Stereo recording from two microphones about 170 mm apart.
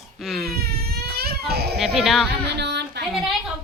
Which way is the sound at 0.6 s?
65° right (ahead or behind).